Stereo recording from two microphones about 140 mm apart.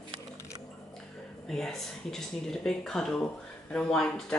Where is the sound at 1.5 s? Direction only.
5° left (ahead or behind).